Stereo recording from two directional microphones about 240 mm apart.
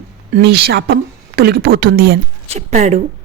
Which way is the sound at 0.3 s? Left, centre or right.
Right.